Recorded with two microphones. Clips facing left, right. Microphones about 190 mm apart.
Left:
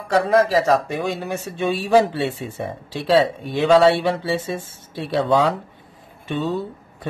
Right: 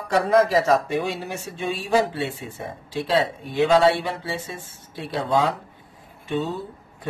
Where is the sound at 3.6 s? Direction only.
75° left (ahead or behind).